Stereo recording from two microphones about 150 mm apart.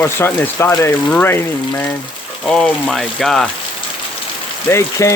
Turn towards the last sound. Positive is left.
turn(degrees=20)  # may be behind; listen again after turning